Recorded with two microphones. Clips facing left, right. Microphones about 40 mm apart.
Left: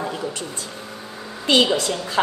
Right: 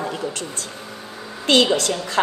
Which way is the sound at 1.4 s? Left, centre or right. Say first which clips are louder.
Right 1 dB; right.